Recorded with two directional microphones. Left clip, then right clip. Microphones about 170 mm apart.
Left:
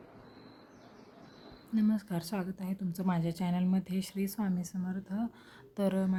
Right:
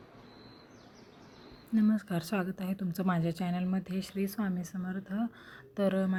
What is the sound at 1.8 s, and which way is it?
Speech, 10° right (ahead or behind).